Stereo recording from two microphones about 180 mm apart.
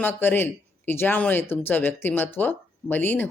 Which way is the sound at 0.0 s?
10° left (ahead or behind).